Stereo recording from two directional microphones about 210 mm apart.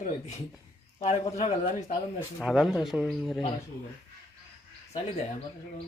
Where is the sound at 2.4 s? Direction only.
Centre (ahead or behind).